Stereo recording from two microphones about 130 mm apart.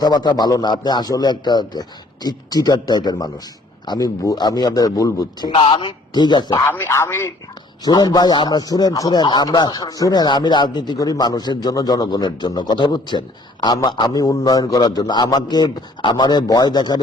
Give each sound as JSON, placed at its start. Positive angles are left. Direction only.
{"t": 0.0, "sound": "speech", "side_deg": 30}
{"t": 6.7, "sound": "a man's voice", "side_deg": 20}
{"t": 7.9, "sound": "speech", "side_deg": 30}